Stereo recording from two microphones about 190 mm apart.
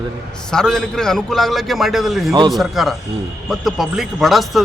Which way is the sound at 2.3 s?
20° right (ahead or behind).